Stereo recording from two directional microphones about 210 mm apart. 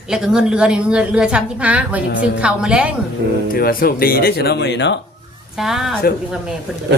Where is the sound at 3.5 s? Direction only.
45° left (ahead or behind).